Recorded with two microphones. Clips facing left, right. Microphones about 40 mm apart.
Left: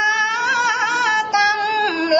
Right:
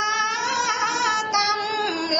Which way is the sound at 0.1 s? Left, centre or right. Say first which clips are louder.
Left 5 dB; centre.